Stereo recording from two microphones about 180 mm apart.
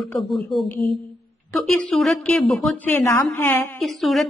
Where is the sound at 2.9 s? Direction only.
15° left (ahead or behind).